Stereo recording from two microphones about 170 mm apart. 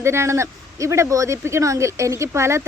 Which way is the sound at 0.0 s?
15° right (ahead or behind).